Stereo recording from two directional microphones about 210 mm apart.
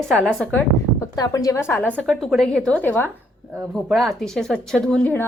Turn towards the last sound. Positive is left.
turn(degrees=10)  # may be behind; listen again after turning